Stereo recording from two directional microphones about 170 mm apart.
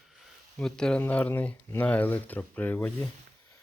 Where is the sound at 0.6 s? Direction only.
5° left (ahead or behind).